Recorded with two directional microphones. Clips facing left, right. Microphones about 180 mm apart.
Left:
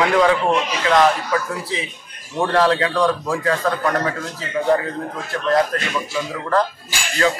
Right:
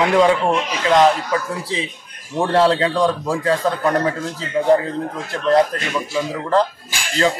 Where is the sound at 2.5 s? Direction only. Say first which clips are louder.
Right 2 dB; 30° right (ahead or behind).